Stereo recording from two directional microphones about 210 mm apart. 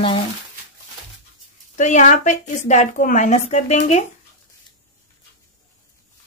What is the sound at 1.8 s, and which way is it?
A woman's voice, 35° left (ahead or behind).